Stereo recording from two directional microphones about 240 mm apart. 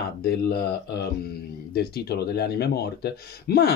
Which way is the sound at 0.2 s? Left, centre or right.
Left.